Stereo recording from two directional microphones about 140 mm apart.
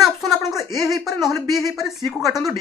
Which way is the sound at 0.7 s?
Centre (ahead or behind).